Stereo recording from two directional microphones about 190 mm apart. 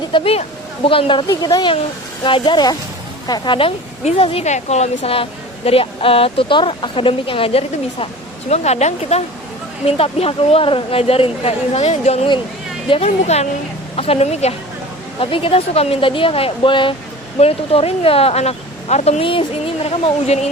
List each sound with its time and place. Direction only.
0.1 s a woman's voice: 30° left (ahead or behind)